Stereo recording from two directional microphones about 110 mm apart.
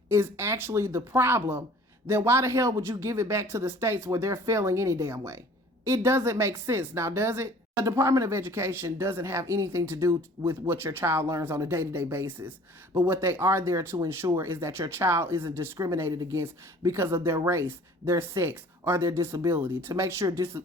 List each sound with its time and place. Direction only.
0.1 s a woman's voice: 25° right (ahead or behind)